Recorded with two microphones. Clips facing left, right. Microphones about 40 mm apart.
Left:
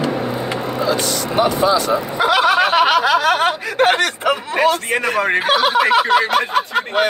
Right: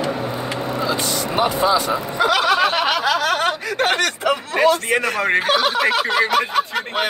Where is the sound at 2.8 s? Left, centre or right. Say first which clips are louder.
Left 5 dB; left.